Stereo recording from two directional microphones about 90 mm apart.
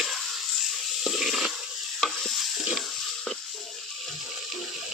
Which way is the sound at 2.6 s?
5° right (ahead or behind).